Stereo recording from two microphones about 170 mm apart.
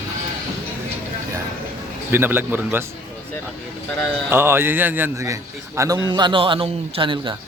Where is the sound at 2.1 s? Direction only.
10° right (ahead or behind).